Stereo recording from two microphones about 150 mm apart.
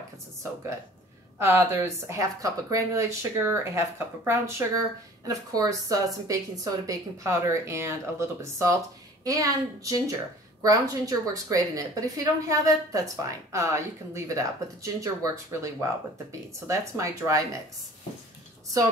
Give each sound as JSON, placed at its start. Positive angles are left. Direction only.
{"t": 1.4, "sound": "a woman's voice", "side_deg": -15}